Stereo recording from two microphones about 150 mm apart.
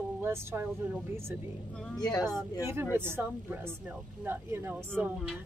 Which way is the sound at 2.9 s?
15° right (ahead or behind).